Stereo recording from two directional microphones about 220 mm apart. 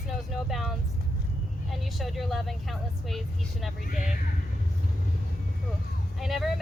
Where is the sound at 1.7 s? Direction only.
Centre (ahead or behind).